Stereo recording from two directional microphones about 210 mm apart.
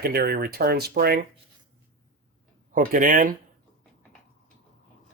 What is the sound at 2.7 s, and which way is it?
Speech, 40° right (ahead or behind).